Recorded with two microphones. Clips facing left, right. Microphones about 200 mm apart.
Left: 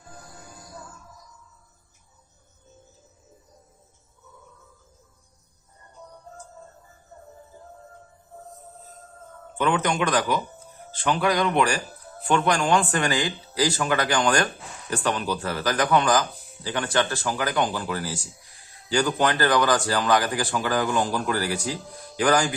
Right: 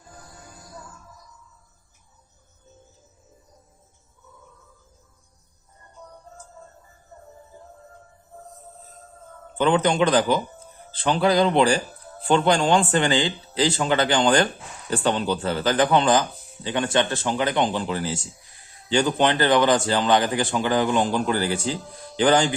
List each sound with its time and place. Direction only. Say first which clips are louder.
9.6 s speech: right 4 dB; 30° right (ahead or behind)